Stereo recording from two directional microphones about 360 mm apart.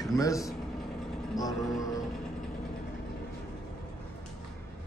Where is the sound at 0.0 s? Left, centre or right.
Centre.